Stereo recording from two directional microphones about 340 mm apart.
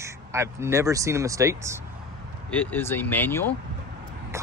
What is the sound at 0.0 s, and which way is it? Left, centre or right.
Speech, centre.